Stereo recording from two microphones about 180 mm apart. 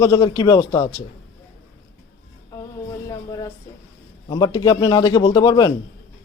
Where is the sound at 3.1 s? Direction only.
20° left (ahead or behind).